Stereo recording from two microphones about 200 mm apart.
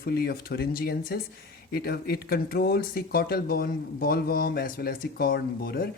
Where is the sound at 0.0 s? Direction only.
50° left (ahead or behind).